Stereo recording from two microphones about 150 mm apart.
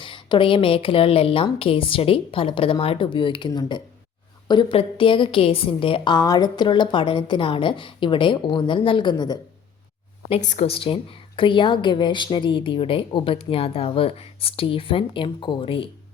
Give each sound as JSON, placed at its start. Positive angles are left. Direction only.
{"t": 0.0, "sound": "a woman's voice", "side_deg": 35}
{"t": 10.5, "sound": "a woman's voice", "side_deg": 45}